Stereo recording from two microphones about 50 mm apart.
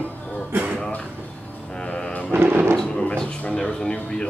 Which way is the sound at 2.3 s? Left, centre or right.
Right.